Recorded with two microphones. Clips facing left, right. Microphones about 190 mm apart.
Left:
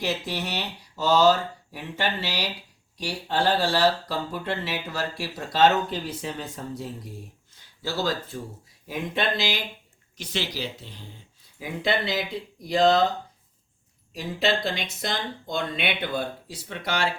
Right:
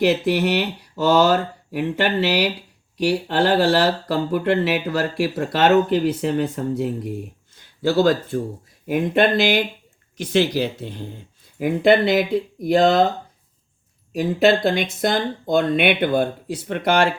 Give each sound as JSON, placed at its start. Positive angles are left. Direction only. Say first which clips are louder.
{"t": 0.0, "sound": "speech", "louder": "right 11 dB", "side_deg": -60}
{"t": 14.1, "sound": "speech", "louder": "right 9 dB", "side_deg": -55}